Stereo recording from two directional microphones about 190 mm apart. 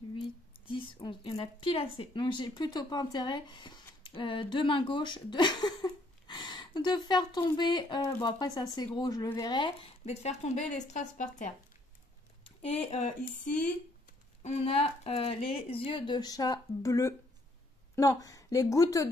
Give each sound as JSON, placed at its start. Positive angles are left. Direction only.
{"t": 0.7, "sound": "speech", "side_deg": 25}
{"t": 12.4, "sound": "speech", "side_deg": 30}
{"t": 14.4, "sound": "a woman's voice", "side_deg": 30}